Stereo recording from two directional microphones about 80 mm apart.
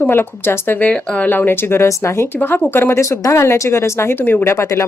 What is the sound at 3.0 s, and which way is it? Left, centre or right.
A woman's voice, left.